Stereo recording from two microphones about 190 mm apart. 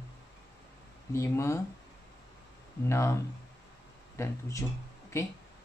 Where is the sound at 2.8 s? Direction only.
15° left (ahead or behind).